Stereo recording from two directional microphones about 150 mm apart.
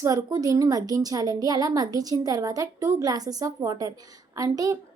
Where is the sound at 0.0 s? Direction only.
20° right (ahead or behind).